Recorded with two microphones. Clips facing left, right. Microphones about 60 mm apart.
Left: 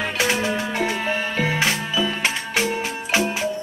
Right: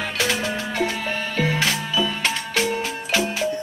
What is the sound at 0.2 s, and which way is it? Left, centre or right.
Music, centre.